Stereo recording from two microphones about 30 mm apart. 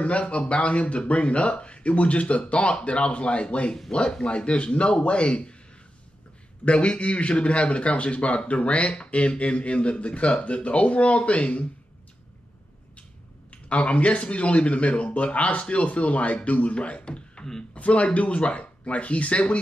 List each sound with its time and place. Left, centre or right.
0.0 s a man's voice: left
6.6 s a man's voice: left
13.5 s speech: left
17.7 s speech: left